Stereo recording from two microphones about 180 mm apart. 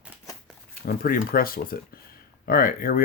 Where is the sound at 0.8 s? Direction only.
55° left (ahead or behind).